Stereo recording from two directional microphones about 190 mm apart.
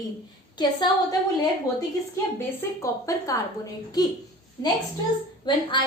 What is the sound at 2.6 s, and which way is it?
Speech, 15° left (ahead or behind).